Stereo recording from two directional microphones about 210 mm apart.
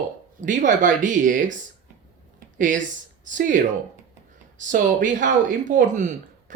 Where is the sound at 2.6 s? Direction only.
40° right (ahead or behind).